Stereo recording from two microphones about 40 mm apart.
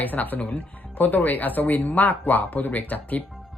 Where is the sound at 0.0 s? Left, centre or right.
Left.